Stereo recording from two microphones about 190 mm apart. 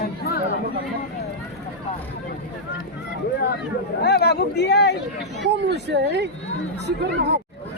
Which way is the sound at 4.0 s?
60° left (ahead or behind).